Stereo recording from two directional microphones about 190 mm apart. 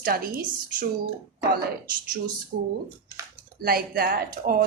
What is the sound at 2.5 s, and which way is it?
Speech, 45° right (ahead or behind).